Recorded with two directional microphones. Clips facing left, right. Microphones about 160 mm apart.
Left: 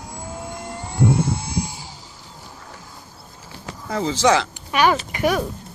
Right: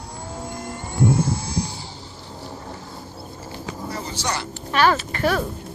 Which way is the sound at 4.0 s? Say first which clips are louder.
Left 14 dB; 90° left.